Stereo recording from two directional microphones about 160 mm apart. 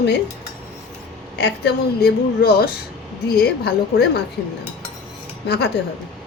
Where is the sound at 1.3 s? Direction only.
90° left.